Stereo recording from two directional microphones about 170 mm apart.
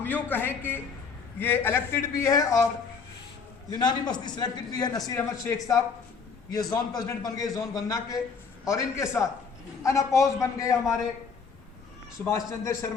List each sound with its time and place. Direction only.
0.0 s a man's voice: 10° left (ahead or behind)
3.7 s a man's voice: 25° left (ahead or behind)
12.2 s a man's voice: 15° left (ahead or behind)